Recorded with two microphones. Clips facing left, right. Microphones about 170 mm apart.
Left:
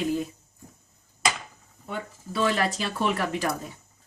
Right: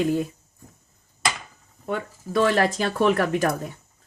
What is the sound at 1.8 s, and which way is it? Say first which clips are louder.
Speech: right 6 dB; 55° right (ahead or behind).